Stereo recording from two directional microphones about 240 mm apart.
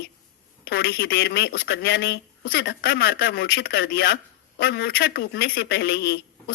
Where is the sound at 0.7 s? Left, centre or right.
Left.